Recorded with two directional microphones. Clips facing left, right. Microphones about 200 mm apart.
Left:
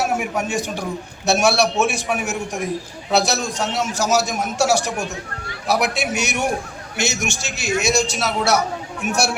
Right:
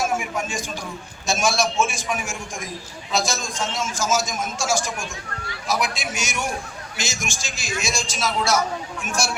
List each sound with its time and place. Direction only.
0.0 s a man's voice: 65° left (ahead or behind)